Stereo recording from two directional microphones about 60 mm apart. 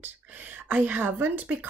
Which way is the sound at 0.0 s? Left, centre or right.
Right.